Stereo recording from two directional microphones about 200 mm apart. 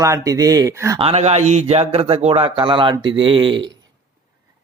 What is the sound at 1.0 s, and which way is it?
Speech, 30° right (ahead or behind).